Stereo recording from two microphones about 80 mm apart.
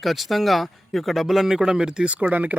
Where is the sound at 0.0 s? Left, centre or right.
Centre.